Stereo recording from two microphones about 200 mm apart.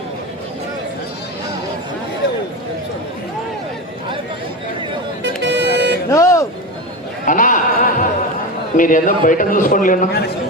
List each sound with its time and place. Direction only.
5.2 s vehicle: 60° right (ahead or behind)
6.1 s music: 15° left (ahead or behind)
7.3 s opera: 40° left (ahead or behind)
8.7 s a man's voice: 45° left (ahead or behind)